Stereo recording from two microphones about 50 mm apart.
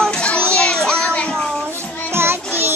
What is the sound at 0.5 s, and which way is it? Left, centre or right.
Child singing, centre.